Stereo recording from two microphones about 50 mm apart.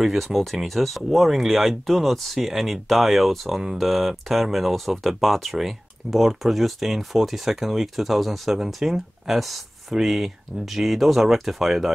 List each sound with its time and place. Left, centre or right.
0.0 s speech: centre